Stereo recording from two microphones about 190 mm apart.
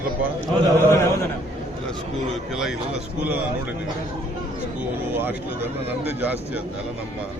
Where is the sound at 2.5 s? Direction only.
Centre (ahead or behind).